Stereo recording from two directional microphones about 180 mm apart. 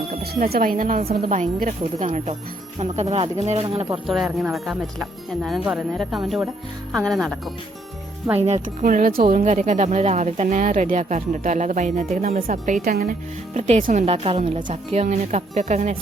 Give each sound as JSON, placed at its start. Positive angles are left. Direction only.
{"t": 0.1, "sound": "speech", "side_deg": -55}
{"t": 4.0, "sound": "speech", "side_deg": 0}
{"t": 8.4, "sound": "speech", "side_deg": -40}